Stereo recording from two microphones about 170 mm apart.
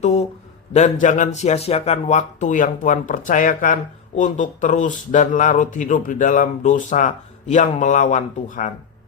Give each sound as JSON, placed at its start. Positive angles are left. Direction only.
{"t": 0.0, "sound": "speech", "side_deg": 40}